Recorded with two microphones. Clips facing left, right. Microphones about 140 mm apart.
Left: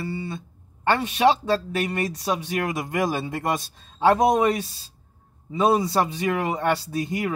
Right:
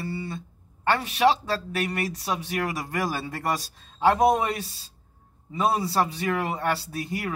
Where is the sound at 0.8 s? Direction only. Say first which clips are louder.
Left 2 dB; 25° left (ahead or behind).